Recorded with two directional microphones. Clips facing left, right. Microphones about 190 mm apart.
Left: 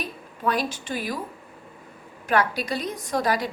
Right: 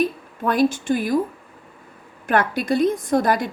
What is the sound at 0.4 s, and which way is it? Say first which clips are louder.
Speech: right 7 dB; 50° right (ahead or behind).